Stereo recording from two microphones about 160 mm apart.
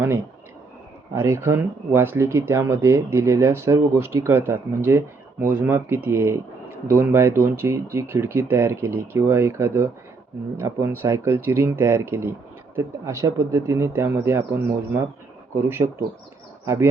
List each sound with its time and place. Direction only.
1.1 s speech: 15° right (ahead or behind)